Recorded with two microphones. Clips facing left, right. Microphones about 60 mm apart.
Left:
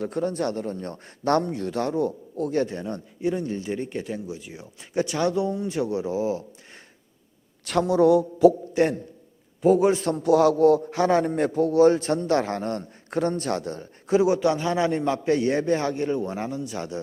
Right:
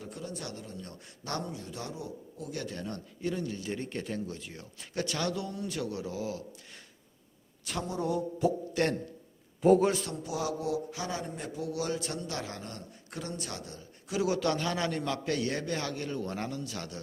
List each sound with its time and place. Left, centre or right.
0.0 s a man's voice: left
2.5 s speech: left
2.7 s speech: left
3.7 s speech: centre
7.6 s a man's voice: left
8.7 s a man's voice: centre
9.6 s a man's voice: centre
10.0 s a man's voice: left
14.1 s speech: left